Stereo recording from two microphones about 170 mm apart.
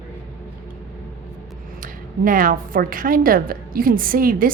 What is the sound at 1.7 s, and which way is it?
A woman's voice, 55° right (ahead or behind).